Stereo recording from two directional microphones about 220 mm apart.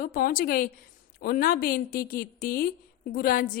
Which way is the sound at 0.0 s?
40° left (ahead or behind).